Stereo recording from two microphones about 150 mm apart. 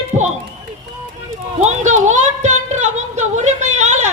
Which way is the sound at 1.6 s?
50° right (ahead or behind).